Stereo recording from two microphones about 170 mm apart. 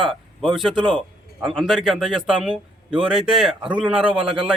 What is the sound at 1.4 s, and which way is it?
A man's voice, centre (ahead or behind).